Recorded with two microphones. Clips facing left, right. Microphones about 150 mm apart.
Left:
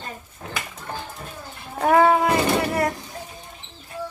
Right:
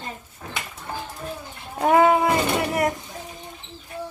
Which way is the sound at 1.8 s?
20° right (ahead or behind).